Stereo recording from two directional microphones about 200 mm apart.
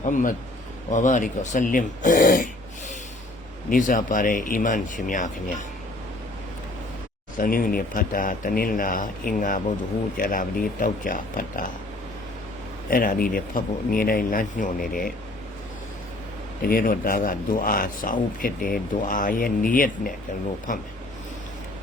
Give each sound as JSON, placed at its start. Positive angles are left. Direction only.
{"t": 0.0, "sound": "speech", "side_deg": 40}
{"t": 3.7, "sound": "speech", "side_deg": 40}
{"t": 7.3, "sound": "speech", "side_deg": 45}
{"t": 12.9, "sound": "speech", "side_deg": 45}
{"t": 16.6, "sound": "speech", "side_deg": 45}